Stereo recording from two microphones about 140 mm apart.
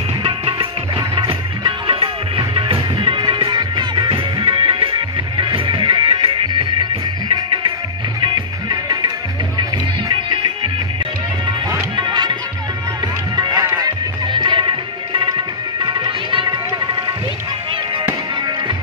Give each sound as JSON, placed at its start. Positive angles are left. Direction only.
{"t": 0.2, "sound": "music", "side_deg": -40}
{"t": 8.2, "sound": "music", "side_deg": -30}
{"t": 12.0, "sound": "music", "side_deg": -30}
{"t": 13.4, "sound": "music", "side_deg": -25}